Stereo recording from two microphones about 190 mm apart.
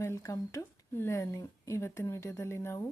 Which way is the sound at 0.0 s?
15° left (ahead or behind).